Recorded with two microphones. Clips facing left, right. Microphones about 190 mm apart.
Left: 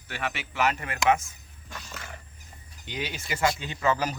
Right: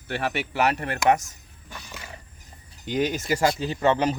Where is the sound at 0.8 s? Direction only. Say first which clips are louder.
Right 3 dB; 40° right (ahead or behind).